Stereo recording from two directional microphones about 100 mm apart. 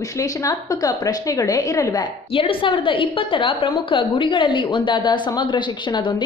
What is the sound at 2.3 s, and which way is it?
A woman's voice, 65° left (ahead or behind).